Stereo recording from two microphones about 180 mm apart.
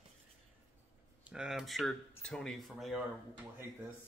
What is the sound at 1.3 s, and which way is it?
Speech, 5° right (ahead or behind).